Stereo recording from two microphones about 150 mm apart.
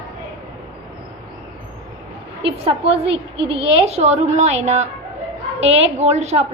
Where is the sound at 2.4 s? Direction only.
40° right (ahead or behind).